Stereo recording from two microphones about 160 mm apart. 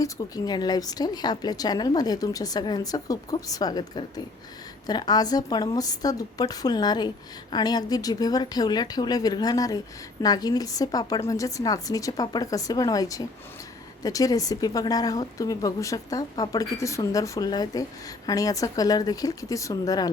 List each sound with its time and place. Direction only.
0.0 s a woman's voice: 25° left (ahead or behind)